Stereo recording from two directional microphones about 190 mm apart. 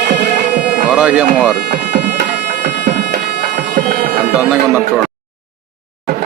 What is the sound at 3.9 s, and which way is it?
Music, 60° right (ahead or behind).